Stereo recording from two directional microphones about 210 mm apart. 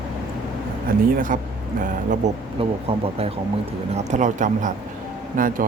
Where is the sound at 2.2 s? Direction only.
35° right (ahead or behind).